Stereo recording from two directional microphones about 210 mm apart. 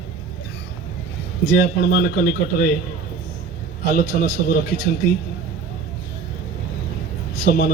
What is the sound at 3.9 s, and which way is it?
Speech, 50° left (ahead or behind).